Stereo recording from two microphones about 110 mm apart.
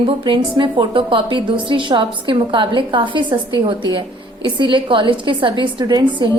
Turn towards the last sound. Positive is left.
turn(degrees=-40)  # may be behind; listen again after turning